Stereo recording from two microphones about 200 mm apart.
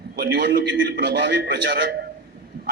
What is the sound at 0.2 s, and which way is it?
A man's voice, 50° right (ahead or behind).